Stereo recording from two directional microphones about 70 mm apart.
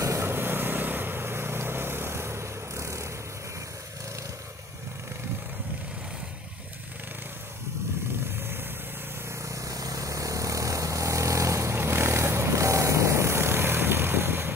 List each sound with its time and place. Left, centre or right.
0.0 s vehicle: right
0.3 s vehicle: right
9.4 s vehicle: right